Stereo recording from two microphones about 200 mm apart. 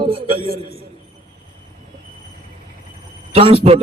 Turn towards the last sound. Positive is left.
turn(degrees=-30)  # may be behind; listen again after turning